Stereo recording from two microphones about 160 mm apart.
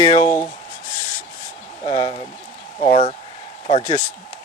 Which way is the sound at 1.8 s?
35° left (ahead or behind).